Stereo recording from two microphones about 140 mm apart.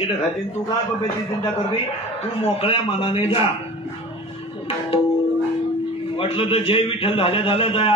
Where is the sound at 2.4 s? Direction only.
40° left (ahead or behind).